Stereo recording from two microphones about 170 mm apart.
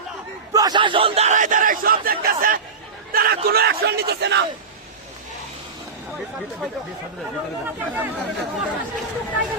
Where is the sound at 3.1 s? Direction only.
65° right (ahead or behind); by 4.4 s 85° right.